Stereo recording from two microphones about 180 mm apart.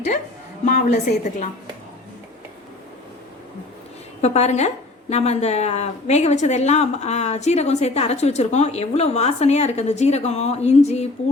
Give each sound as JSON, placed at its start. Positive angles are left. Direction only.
{"t": 0.6, "sound": "a woman's voice", "side_deg": 40}
{"t": 4.2, "sound": "a woman's voice", "side_deg": 35}